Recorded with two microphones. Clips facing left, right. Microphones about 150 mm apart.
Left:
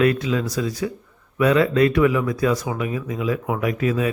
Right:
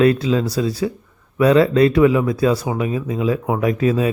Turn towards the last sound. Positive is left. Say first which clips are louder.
# right 4 dB
turn(degrees=-30)  # may be behind; listen again after turning